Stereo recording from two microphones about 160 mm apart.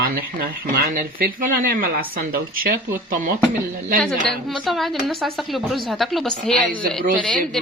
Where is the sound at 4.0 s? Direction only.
5° left (ahead or behind).